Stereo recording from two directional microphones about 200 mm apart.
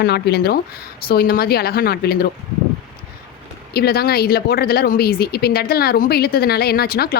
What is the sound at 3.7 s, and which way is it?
Speech, 50° left (ahead or behind).